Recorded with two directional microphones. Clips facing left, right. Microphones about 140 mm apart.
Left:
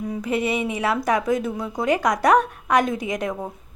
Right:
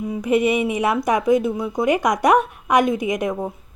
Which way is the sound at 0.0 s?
15° right (ahead or behind).